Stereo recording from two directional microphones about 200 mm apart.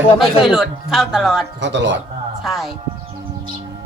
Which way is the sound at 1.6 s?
60° right (ahead or behind).